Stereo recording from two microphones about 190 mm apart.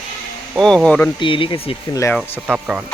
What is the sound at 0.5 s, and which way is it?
Speech, centre (ahead or behind).